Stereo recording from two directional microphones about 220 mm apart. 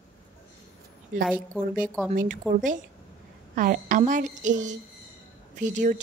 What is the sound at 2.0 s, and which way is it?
Speech, 35° right (ahead or behind).